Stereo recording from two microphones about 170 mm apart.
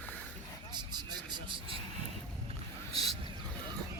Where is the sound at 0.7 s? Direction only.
25° right (ahead or behind).